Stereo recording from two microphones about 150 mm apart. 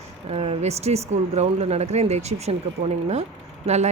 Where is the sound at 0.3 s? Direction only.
45° right (ahead or behind).